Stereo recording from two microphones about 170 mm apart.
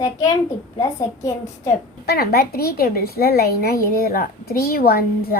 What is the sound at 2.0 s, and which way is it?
A woman's voice, 65° left (ahead or behind).